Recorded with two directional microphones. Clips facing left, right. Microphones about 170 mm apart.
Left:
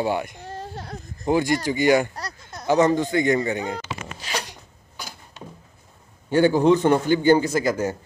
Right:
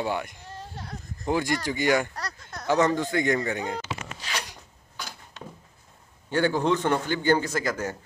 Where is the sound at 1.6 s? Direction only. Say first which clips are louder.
Left 5 dB; 5° left (ahead or behind).